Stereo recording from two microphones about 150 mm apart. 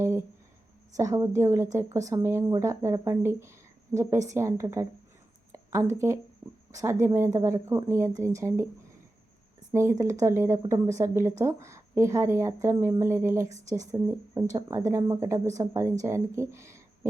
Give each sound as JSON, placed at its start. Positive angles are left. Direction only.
{"t": 0.0, "sound": "a woman's voice", "side_deg": -15}
{"t": 9.7, "sound": "a woman's voice", "side_deg": -20}